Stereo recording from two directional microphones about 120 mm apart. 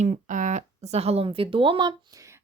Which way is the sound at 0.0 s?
90° right.